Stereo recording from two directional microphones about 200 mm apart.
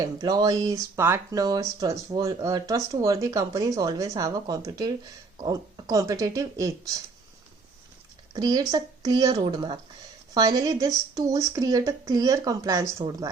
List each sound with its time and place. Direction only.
0.0 s speech: 20° right (ahead or behind)
8.3 s speech: 20° right (ahead or behind)